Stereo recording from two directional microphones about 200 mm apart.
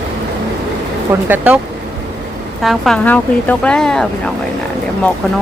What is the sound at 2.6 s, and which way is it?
Speech, centre (ahead or behind).